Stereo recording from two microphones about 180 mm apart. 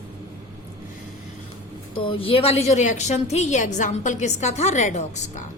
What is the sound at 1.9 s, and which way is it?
A woman's voice, 30° left (ahead or behind).